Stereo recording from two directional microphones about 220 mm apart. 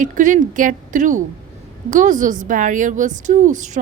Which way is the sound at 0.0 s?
35° right (ahead or behind).